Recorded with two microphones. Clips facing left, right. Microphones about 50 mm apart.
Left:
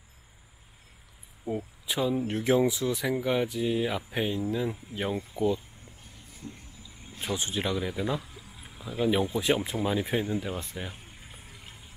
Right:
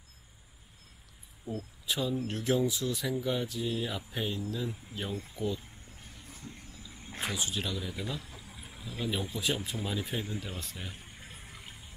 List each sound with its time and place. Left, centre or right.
1.4 s speech: left
7.1 s a sound: right
7.3 s speech: left
8.6 s a sound: centre
9.1 s speech: left
10.6 s speech: left
11.1 s water: centre